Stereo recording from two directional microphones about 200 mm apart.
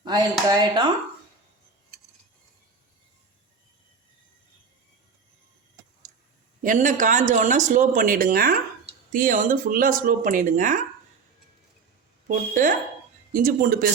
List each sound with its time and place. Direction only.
0.0 s speech: 20° right (ahead or behind)
6.6 s speech: 40° right (ahead or behind)
12.3 s speech: 40° right (ahead or behind)